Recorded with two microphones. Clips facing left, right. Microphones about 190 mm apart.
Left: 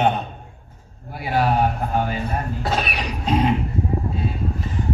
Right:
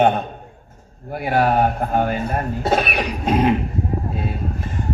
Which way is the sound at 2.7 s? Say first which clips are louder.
Right 7 dB; 55° right (ahead or behind).